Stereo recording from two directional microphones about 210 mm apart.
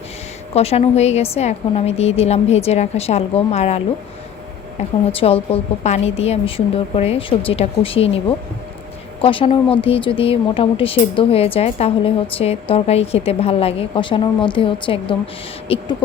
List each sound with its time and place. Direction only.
0.5 s speech: 30° left (ahead or behind)
9.2 s speech: 25° left (ahead or behind)